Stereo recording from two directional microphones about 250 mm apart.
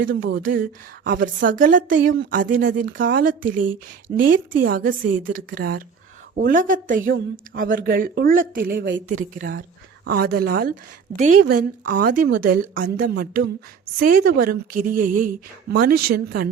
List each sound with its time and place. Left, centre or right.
0.0 s speech: right
9.3 s speech: right